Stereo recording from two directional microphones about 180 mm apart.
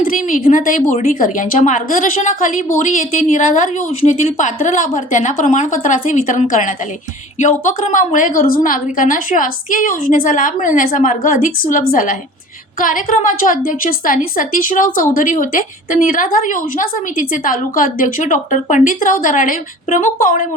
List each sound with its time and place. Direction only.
0.0 s a woman's voice: 50° left (ahead or behind)